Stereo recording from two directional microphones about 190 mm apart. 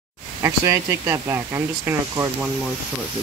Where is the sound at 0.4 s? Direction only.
15° right (ahead or behind).